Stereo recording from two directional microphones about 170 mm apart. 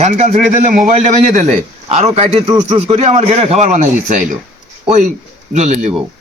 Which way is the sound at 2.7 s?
35° right (ahead or behind).